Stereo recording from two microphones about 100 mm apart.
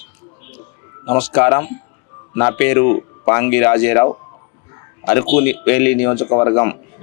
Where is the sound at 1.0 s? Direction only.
25° left (ahead or behind).